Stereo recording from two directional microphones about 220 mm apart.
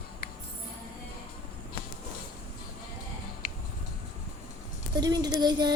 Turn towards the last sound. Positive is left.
turn(degrees=-20)  # may be behind; listen again after turning